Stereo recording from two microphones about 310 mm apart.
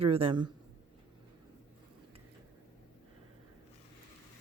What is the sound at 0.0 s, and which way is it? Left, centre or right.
Speech, centre.